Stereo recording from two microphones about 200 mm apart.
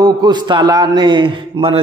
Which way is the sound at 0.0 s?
20° right (ahead or behind).